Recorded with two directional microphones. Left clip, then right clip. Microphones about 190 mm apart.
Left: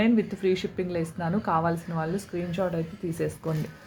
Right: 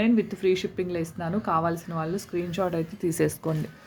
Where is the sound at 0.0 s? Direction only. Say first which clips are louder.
Right 1 dB; 10° right (ahead or behind); by 3.3 s 35° right (ahead or behind).